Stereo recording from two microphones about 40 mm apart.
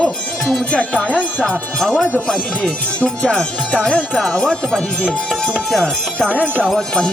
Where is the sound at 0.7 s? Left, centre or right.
Left.